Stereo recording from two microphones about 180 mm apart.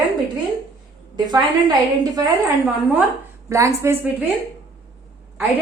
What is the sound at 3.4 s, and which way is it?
Speech, 15° right (ahead or behind).